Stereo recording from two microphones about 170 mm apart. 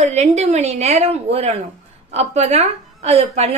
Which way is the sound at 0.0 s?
40° right (ahead or behind).